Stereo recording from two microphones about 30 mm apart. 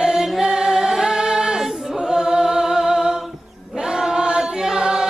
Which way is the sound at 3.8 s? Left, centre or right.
Right.